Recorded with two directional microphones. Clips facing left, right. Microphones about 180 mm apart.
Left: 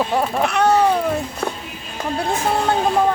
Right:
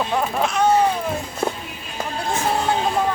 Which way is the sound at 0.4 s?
65° left (ahead or behind).